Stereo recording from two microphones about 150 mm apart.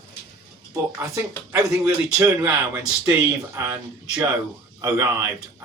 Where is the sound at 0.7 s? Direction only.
20° right (ahead or behind).